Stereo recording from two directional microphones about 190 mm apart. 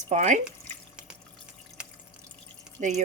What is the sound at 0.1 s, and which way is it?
Speech, 40° right (ahead or behind).